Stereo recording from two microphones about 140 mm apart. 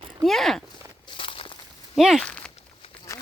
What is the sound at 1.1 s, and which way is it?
Walk, 40° left (ahead or behind).